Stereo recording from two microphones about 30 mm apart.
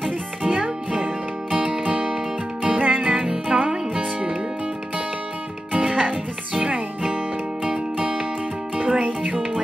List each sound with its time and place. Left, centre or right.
0.4 s music: right
3.2 s music: right
3.9 s music: right
5.8 s music: right
8.7 s music: right